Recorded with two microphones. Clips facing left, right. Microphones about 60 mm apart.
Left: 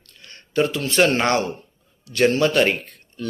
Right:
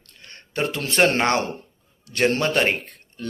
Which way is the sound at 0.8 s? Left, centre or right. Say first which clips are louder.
Right 1 dB; right.